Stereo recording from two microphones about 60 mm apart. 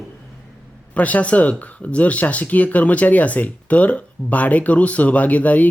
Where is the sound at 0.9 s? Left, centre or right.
Left.